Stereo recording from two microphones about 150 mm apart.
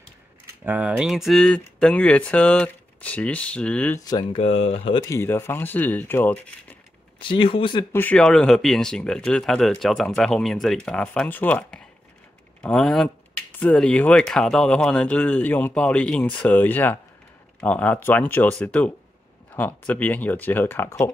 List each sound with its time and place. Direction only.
0.7 s speech: 10° right (ahead or behind); by 4.0 s 10° left (ahead or behind)
4.0 s speech: 30° left (ahead or behind)
5.0 s speech: 15° left (ahead or behind)
7.2 s speech: 35° left (ahead or behind)
7.9 s speech: 10° left (ahead or behind)